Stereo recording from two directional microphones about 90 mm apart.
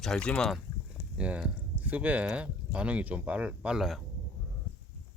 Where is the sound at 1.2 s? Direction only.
15° right (ahead or behind).